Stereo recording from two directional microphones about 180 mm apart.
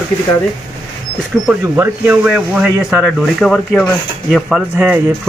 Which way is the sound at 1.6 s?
10° right (ahead or behind).